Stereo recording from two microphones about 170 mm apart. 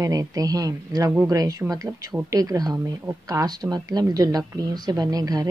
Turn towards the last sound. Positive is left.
turn(degrees=-20)  # may be behind; listen again after turning